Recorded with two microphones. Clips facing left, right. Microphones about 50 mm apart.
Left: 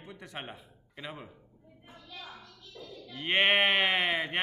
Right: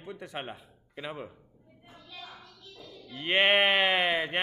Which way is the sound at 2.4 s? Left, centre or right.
Right.